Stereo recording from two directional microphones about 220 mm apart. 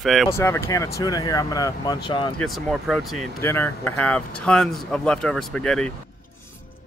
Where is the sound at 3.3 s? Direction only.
10° left (ahead or behind).